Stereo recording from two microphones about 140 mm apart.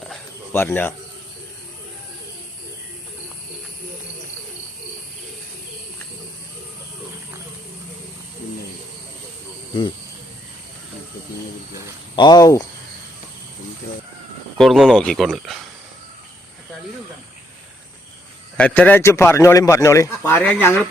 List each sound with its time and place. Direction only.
0.5 s a man's voice: 15° left (ahead or behind)
12.1 s speech: 30° left (ahead or behind)
14.6 s speech: centre (ahead or behind)
18.5 s a man's voice: 10° left (ahead or behind)